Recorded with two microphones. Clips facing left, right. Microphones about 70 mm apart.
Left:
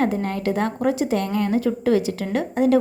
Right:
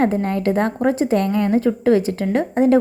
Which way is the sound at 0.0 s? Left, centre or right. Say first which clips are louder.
Right 4 dB; right.